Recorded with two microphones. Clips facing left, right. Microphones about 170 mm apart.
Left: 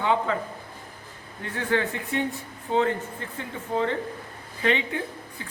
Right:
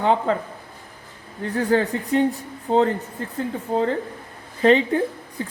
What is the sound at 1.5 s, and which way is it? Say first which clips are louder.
Speech: right 6 dB; 35° right (ahead or behind).